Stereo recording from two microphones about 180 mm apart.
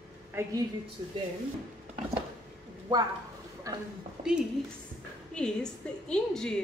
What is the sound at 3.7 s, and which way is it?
Speech, 20° right (ahead or behind).